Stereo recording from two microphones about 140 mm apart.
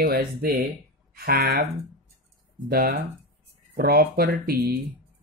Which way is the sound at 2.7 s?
90° right.